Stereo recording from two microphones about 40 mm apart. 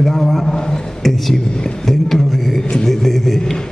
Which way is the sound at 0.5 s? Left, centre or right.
Centre.